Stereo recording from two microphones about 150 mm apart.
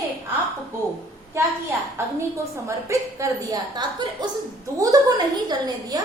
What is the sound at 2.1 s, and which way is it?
A woman's voice, 20° right (ahead or behind).